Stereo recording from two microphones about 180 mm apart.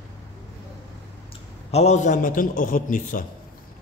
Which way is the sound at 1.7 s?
40° left (ahead or behind).